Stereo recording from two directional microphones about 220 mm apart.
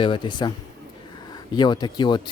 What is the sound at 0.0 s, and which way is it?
Speech, 20° left (ahead or behind).